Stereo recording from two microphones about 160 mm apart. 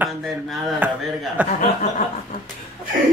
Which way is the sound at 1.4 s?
10° right (ahead or behind).